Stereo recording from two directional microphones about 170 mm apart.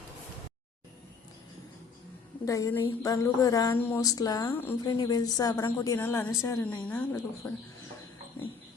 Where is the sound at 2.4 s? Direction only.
20° left (ahead or behind).